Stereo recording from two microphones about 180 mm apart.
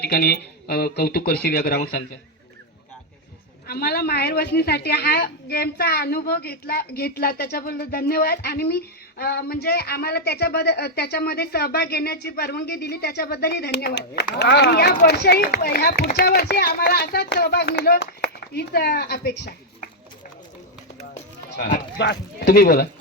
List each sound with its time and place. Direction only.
0.0 s a woman's voice: 60° left (ahead or behind)
3.7 s a woman's voice: 60° left (ahead or behind)
21.9 s speech: 70° left (ahead or behind)